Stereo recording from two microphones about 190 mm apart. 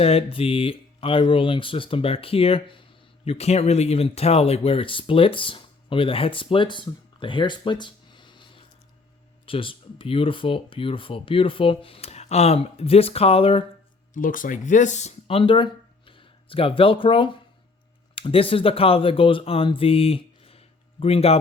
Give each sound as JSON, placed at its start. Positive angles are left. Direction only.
{"t": 0.0, "sound": "speech", "side_deg": 30}
{"t": 14.1, "sound": "speech", "side_deg": 45}